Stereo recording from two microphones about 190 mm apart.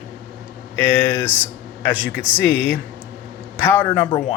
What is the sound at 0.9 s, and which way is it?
Speech, 10° left (ahead or behind).